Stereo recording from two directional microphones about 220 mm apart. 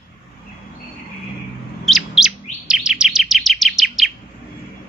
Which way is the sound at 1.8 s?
Centre (ahead or behind).